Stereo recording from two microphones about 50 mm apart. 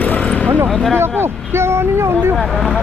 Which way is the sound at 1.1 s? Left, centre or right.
Right.